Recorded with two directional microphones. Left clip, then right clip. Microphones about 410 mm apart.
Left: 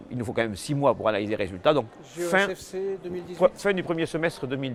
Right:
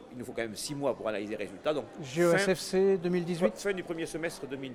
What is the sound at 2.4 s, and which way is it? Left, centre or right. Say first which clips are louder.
Speech: right 3 dB; right.